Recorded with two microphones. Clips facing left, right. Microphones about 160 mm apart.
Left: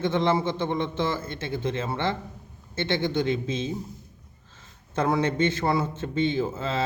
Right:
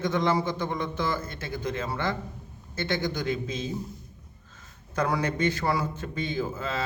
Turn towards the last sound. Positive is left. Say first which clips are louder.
# left 3 dB
turn(degrees=25)  # may be behind; listen again after turning